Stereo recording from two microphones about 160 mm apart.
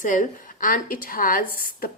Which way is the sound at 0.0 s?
55° left (ahead or behind).